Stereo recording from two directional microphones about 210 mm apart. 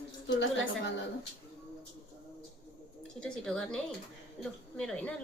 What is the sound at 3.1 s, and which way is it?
A woman's voice, 5° left (ahead or behind).